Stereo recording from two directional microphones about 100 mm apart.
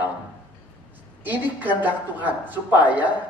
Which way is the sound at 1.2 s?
15° right (ahead or behind).